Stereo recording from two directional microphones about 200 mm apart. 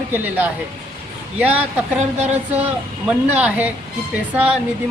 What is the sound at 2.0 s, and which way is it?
Speech, 35° right (ahead or behind).